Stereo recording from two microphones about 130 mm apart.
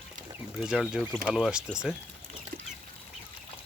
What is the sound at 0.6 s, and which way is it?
Speech, 5° right (ahead or behind).